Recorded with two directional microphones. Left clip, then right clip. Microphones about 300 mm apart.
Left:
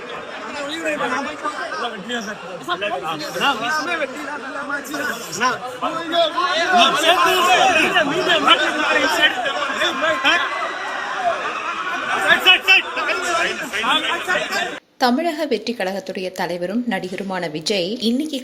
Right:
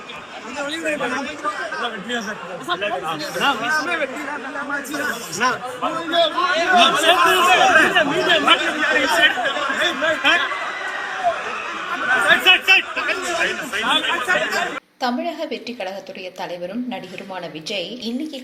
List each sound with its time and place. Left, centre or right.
0.9 s a man's voice: centre
12.1 s chatter: centre
15.0 s a woman's voice: left
17.7 s a woman's voice: left